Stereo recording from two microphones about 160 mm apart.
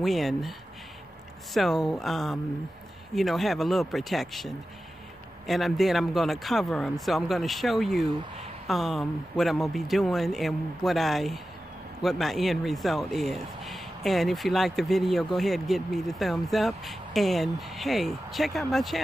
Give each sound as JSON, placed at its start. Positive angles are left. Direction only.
{"t": 0.0, "sound": "speech", "side_deg": 0}